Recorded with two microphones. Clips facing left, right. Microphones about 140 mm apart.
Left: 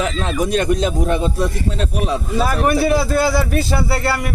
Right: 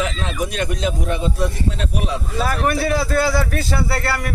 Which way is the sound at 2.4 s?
15° left (ahead or behind).